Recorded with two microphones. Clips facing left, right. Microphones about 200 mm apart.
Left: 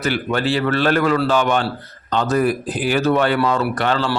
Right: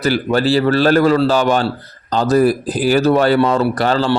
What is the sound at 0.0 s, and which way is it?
A man's voice, 35° right (ahead or behind).